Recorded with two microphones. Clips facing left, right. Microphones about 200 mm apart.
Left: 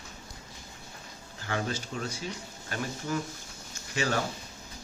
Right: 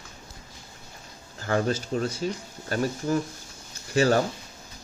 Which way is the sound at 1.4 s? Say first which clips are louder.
Right 8 dB; 40° right (ahead or behind).